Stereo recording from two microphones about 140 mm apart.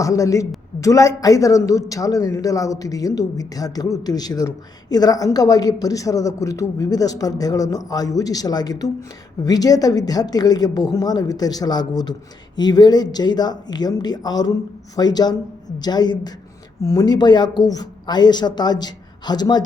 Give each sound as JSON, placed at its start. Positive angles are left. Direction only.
{"t": 0.0, "sound": "a man's voice", "side_deg": 25}